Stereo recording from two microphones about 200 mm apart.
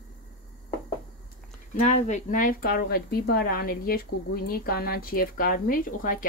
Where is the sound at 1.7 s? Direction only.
35° left (ahead or behind).